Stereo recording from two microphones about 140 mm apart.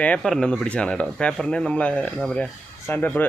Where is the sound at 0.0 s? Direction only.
5° left (ahead or behind).